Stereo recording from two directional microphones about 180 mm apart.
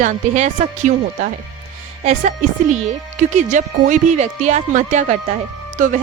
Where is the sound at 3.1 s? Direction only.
45° right (ahead or behind).